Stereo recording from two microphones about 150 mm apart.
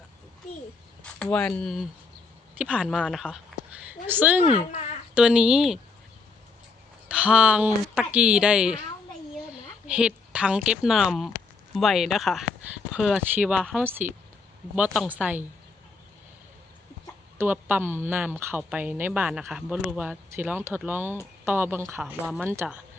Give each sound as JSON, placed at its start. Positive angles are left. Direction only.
{"t": 1.2, "sound": "speech", "side_deg": 10}
{"t": 7.2, "sound": "speech", "side_deg": -10}
{"t": 15.1, "sound": "speech", "side_deg": -10}
{"t": 17.3, "sound": "speech", "side_deg": -15}
{"t": 22.0, "sound": "speech", "side_deg": 0}
{"t": 22.4, "sound": "speech", "side_deg": -15}